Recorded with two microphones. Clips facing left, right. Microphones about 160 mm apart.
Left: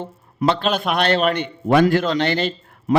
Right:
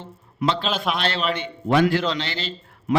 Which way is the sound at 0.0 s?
55° left (ahead or behind).